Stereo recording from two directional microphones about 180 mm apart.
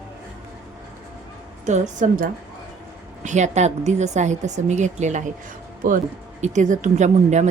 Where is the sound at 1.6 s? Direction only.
40° right (ahead or behind).